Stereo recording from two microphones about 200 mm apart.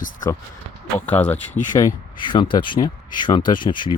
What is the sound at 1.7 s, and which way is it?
Speech, 20° left (ahead or behind).